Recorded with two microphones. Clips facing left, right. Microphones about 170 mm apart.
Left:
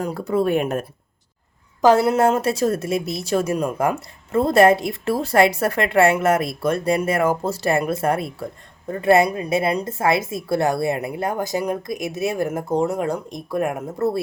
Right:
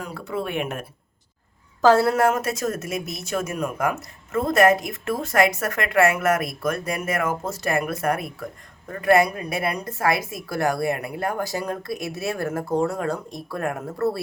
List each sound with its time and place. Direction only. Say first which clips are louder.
0.0 s speech: left 8 dB; 40° left (ahead or behind)
1.8 s a woman's voice: left 2 dB; 20° left (ahead or behind)